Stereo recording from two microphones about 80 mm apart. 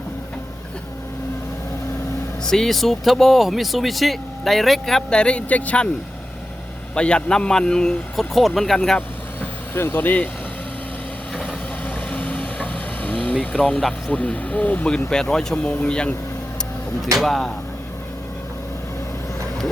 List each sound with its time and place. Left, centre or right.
2.4 s speech: centre
6.9 s speech: centre
9.0 s vehicle: left
12.1 s vehicle: centre
13.6 s speech: centre
17.2 s speech: centre